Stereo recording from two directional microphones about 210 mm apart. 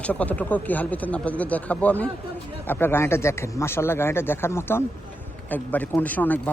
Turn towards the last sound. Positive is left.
turn(degrees=10)  # may be behind; listen again after turning